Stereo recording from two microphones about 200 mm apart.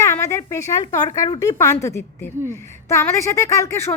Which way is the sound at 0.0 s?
15° left (ahead or behind).